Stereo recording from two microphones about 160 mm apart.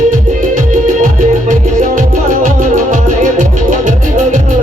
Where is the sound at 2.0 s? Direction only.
55° right (ahead or behind).